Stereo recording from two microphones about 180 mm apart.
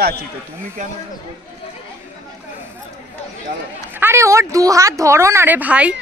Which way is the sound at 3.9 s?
15° right (ahead or behind).